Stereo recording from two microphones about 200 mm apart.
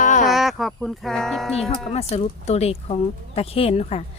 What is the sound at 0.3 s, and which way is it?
Speech, centre (ahead or behind).